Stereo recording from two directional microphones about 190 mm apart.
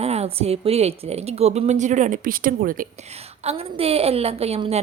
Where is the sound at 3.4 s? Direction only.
30° right (ahead or behind).